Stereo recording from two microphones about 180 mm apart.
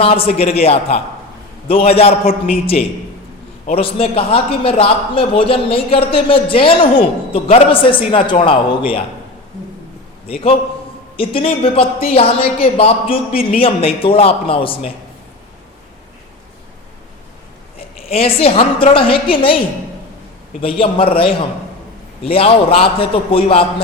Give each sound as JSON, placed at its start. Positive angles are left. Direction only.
{"t": 0.0, "sound": "a man's voice", "side_deg": 30}
{"t": 10.2, "sound": "a man's voice", "side_deg": 35}
{"t": 17.7, "sound": "a woman's voice", "side_deg": 30}
{"t": 20.6, "sound": "a man's voice", "side_deg": 30}